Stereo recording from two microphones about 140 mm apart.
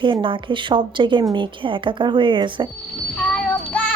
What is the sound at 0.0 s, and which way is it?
A woman's voice, 35° right (ahead or behind).